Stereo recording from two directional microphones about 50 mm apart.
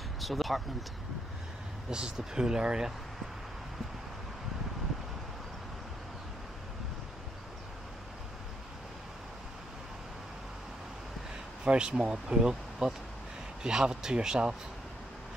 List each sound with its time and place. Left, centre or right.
0.2 s speech: centre
1.9 s speech: centre
11.6 s speech: centre